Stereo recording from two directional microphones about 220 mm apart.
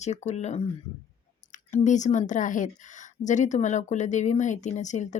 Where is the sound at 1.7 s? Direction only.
35° left (ahead or behind).